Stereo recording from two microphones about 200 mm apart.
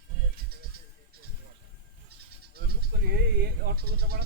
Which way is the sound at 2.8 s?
50° right (ahead or behind).